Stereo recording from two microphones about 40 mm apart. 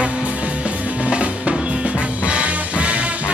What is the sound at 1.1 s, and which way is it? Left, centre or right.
Music, right.